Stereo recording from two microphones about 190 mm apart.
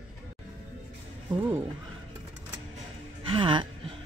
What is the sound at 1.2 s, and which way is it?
Speech, 10° right (ahead or behind).